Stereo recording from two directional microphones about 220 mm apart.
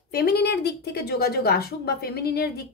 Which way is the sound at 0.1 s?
45° left (ahead or behind).